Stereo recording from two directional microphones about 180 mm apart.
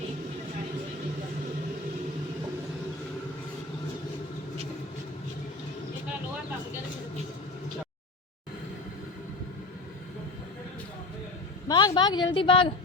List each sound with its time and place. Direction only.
11.7 s a woman's voice: 25° left (ahead or behind)